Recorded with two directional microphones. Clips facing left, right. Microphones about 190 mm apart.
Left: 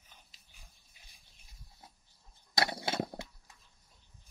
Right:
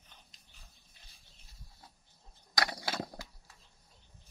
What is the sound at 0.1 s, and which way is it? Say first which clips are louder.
Pig: even; 10° left (ahead or behind).